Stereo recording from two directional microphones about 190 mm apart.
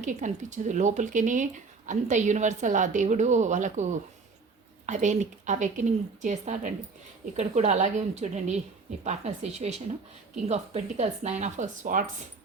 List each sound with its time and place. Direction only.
0.0 s speech: 40° right (ahead or behind)